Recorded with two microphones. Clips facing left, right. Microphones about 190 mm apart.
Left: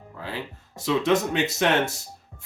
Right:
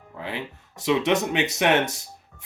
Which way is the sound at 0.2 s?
20° right (ahead or behind).